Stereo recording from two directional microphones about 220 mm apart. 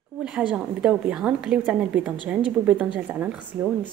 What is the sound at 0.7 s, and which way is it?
Speech, 5° right (ahead or behind).